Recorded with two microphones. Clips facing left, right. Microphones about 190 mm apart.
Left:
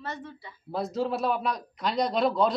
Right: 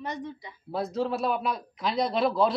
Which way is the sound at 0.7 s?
Centre (ahead or behind).